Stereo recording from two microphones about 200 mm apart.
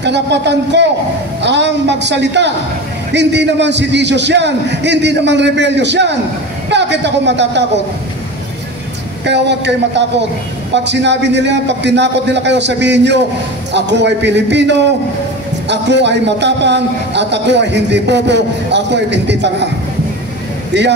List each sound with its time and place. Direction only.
0.0 s a man's voice: 60° right (ahead or behind)
9.2 s a man's voice: 60° right (ahead or behind)
20.7 s a man's voice: 60° right (ahead or behind)